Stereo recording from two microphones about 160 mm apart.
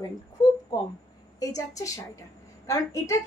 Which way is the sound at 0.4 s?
25° left (ahead or behind).